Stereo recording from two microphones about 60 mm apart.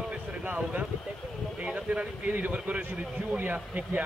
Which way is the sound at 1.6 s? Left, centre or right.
Centre.